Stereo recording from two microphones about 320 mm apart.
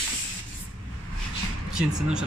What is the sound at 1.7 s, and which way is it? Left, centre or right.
Speech, centre.